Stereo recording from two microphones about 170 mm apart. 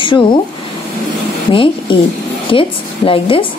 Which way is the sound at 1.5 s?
30° left (ahead or behind).